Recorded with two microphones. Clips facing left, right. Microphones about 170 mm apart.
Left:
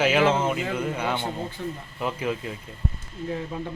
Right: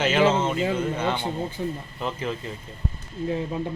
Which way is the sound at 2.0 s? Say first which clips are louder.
Left 2 dB; 10° left (ahead or behind).